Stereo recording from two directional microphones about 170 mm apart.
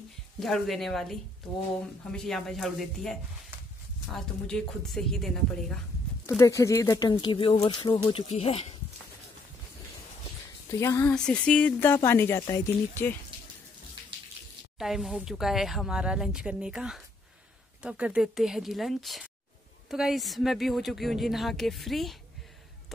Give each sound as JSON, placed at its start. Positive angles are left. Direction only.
{"t": 0.4, "sound": "speech", "side_deg": 0}
{"t": 2.1, "sound": "speech", "side_deg": 0}
{"t": 6.2, "sound": "speech", "side_deg": 20}
{"t": 10.8, "sound": "speech", "side_deg": 15}
{"t": 11.1, "sound": "speech", "side_deg": 5}
{"t": 14.8, "sound": "speech", "side_deg": 0}